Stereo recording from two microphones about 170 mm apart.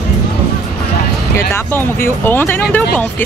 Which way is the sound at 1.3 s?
15° left (ahead or behind).